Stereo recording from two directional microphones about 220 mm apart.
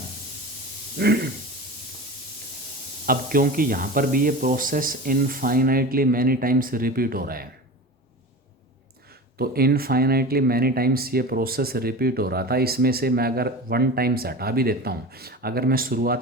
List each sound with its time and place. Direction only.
0.9 s speech: 50° right (ahead or behind)
3.1 s speech: 40° right (ahead or behind)
9.4 s speech: 45° right (ahead or behind)